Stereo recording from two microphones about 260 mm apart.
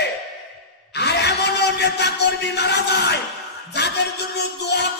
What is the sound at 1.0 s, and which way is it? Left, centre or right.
A man's voice, left.